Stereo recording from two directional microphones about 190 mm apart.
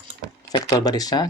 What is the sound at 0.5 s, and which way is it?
Speech, 20° left (ahead or behind).